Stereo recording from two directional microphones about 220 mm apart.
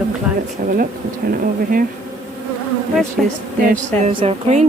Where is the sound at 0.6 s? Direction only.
35° right (ahead or behind).